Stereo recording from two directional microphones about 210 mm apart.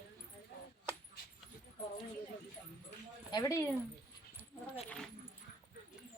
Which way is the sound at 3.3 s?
15° left (ahead or behind).